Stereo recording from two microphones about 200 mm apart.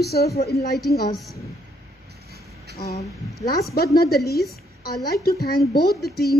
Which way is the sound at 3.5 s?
50° left (ahead or behind).